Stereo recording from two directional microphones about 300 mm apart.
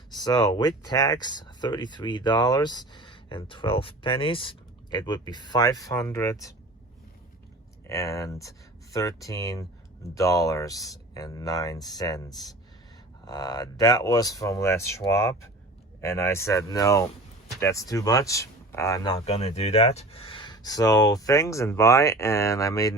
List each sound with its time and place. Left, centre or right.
0.1 s speech: centre
7.9 s speech: centre